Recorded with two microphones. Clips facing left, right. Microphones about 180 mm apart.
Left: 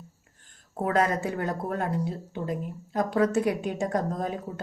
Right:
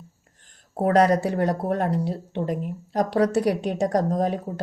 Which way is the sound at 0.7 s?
35° right (ahead or behind).